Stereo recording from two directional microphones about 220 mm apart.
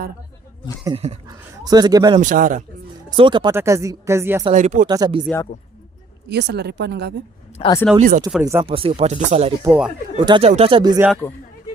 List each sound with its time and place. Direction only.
0.9 s speech: 30° right (ahead or behind)
1.3 s speech: 15° right (ahead or behind)
2.1 s a man's voice: 35° right (ahead or behind)
3.1 s speech: 20° right (ahead or behind)
4.5 s a man's voice: 35° right (ahead or behind)
4.9 s speech: 20° right (ahead or behind)
6.2 s speech: 50° right (ahead or behind)
7.6 s speech: 25° left (ahead or behind)
7.9 s a man's voice: 35° right (ahead or behind)
8.3 s speech: 10° right (ahead or behind)
8.6 s speech: 25° right (ahead or behind)
9.6 s speech: 5° right (ahead or behind)
10.2 s speech: 25° right (ahead or behind)
11.2 s a man's voice: 10° left (ahead or behind)